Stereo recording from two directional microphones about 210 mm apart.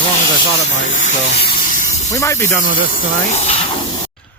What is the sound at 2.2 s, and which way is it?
Speech, 15° left (ahead or behind).